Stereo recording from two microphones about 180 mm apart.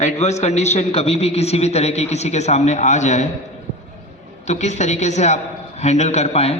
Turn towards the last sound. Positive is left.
turn(degrees=35)  # may be behind; listen again after turning